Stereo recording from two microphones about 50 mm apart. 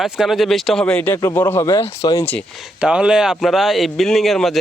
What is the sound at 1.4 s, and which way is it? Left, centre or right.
Speech, left.